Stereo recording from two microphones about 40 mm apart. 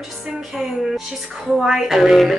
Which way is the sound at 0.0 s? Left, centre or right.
Centre.